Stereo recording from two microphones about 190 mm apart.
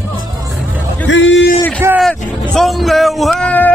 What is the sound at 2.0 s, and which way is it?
Music, centre (ahead or behind).